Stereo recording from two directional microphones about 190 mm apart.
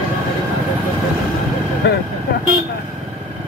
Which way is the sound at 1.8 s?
65° left (ahead or behind).